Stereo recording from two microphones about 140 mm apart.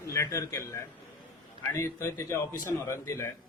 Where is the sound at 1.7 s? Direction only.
20° left (ahead or behind).